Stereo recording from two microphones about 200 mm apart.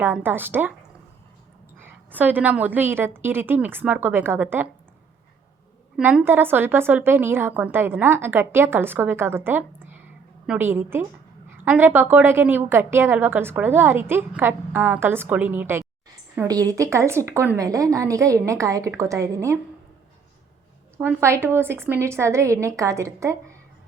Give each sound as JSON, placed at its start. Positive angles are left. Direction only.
{"t": 0.0, "sound": "a woman's voice", "side_deg": -10}
{"t": 1.8, "sound": "a woman's voice", "side_deg": -10}
{"t": 6.0, "sound": "a woman's voice", "side_deg": -10}
{"t": 21.0, "sound": "a woman's voice", "side_deg": -10}